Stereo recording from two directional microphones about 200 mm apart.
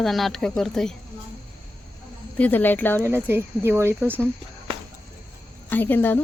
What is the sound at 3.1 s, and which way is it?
Speech, 10° right (ahead or behind).